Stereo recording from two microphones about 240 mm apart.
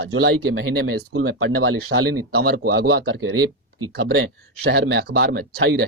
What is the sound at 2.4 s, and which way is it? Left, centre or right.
Speech, right.